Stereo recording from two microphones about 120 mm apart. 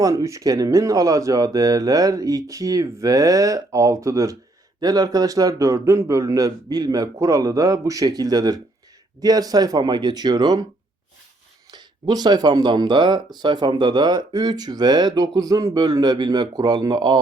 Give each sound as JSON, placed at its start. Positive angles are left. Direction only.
{"t": 0.0, "sound": "speech", "side_deg": -30}
{"t": 11.7, "sound": "speech", "side_deg": -35}